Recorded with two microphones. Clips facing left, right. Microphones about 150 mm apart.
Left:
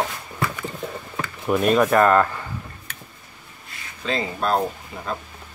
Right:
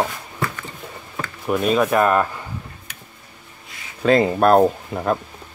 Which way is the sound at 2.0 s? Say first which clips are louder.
Left 1 dB; 15° right (ahead or behind).